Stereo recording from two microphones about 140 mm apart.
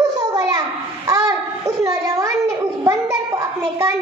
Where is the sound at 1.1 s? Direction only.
25° right (ahead or behind).